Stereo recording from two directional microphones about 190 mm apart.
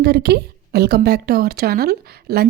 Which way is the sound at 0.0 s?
60° right (ahead or behind).